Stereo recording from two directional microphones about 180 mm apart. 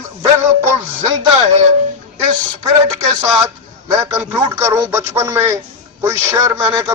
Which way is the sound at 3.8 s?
15° right (ahead or behind).